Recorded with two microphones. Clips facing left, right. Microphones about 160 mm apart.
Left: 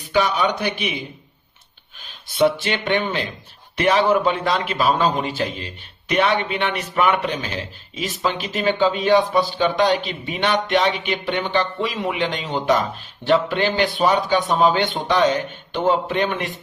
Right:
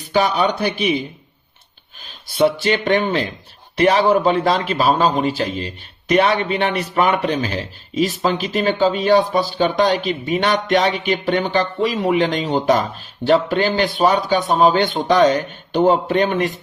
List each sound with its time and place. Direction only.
0.1 s a man's voice: 35° right (ahead or behind)
2.4 s a man's voice: 40° right (ahead or behind)